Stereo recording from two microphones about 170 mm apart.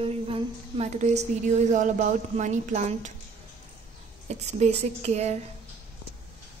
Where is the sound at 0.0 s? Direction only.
35° right (ahead or behind).